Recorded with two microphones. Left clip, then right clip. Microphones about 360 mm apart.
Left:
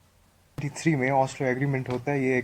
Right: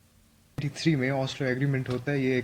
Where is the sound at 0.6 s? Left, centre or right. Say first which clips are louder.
Left 2 dB; centre.